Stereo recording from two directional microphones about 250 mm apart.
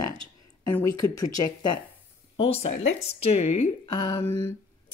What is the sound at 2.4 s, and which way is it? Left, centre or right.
Speech, left.